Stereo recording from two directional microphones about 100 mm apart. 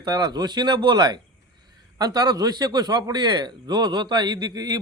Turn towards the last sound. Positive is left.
turn(degrees=-45)  # may be behind; listen again after turning